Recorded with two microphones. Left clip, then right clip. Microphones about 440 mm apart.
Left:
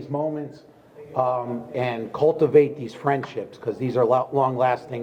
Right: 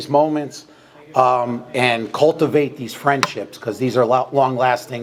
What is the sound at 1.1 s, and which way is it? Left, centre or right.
A man's voice, centre.